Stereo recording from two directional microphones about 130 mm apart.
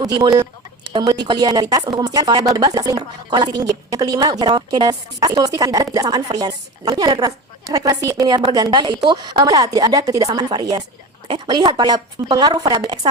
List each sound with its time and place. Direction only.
0.0 s speech: 30° right (ahead or behind)